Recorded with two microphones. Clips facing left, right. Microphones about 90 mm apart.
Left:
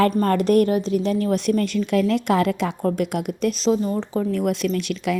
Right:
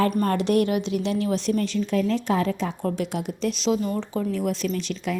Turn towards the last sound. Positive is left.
turn(degrees=60)  # may be behind; listen again after turning